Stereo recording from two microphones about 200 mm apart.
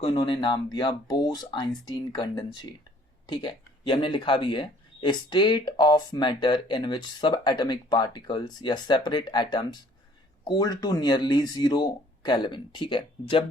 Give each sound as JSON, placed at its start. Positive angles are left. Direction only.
{"t": 0.0, "sound": "speech", "side_deg": 25}